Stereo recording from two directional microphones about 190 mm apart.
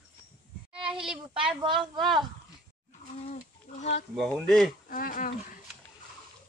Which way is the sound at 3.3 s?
40° left (ahead or behind).